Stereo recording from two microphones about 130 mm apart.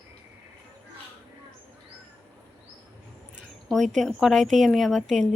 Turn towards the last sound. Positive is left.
turn(degrees=0)  # may be behind; listen again after turning